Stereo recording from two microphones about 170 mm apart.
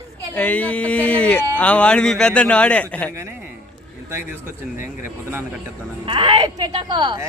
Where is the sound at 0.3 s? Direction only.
10° left (ahead or behind).